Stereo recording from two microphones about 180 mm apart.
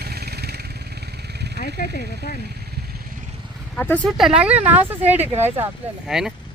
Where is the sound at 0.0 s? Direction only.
60° right (ahead or behind).